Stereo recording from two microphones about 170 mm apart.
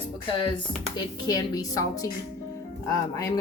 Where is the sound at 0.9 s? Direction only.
20° left (ahead or behind).